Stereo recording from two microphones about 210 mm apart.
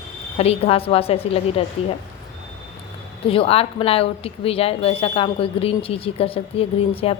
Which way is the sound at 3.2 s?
25° left (ahead or behind).